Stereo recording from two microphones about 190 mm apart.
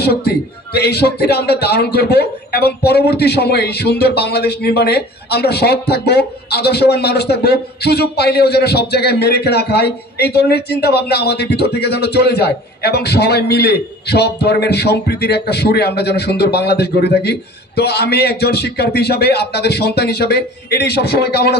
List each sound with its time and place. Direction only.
0.0 s a man's voice: 55° left (ahead or behind)